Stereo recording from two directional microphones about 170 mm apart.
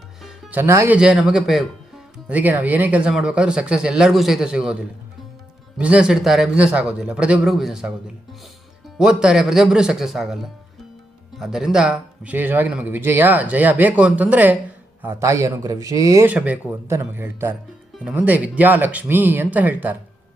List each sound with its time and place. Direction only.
0.2 s music: 5° right (ahead or behind)
0.9 s a man's voice: 5° right (ahead or behind); by 16.3 s 20° right (ahead or behind)
16.3 s a man's voice: 10° right (ahead or behind)